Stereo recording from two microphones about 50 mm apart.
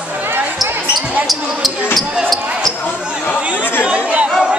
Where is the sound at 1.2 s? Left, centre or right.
Centre.